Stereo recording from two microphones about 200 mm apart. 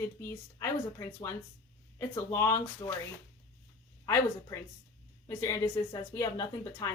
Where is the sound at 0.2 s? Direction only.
15° left (ahead or behind).